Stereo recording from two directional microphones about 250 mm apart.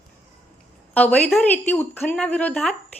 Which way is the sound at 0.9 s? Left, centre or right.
Centre.